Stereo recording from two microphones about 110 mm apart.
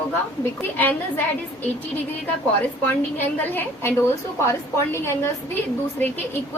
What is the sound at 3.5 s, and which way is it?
A woman's voice, 20° left (ahead or behind).